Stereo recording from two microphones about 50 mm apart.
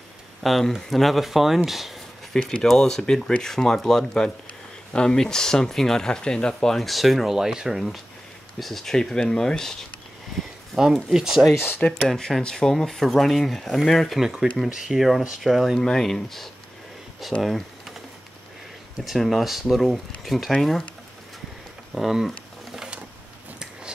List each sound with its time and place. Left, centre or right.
0.4 s speech: centre
2.6 s speech: centre
11.1 s speech: centre
11.8 s speech: left
12.2 s speech: centre
14.2 s speech: centre
15.8 s speech: centre
17.4 s typing: centre
19.0 s speech: centre
21.9 s a sound: centre